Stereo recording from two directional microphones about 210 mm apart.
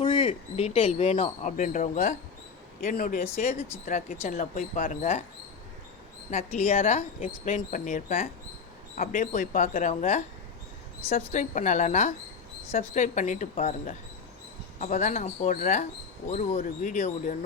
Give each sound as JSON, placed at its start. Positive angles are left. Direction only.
{"t": 0.0, "sound": "speech", "side_deg": 25}
{"t": 6.3, "sound": "speech", "side_deg": 30}
{"t": 11.3, "sound": "speech", "side_deg": 35}